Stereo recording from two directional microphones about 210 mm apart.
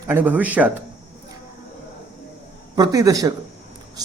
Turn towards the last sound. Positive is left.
turn(degrees=-15)  # may be behind; listen again after turning